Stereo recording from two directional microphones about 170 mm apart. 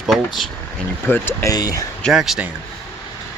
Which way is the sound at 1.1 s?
15° left (ahead or behind).